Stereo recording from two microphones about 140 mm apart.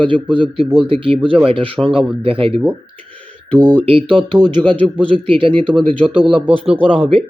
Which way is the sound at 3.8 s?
40° right (ahead or behind).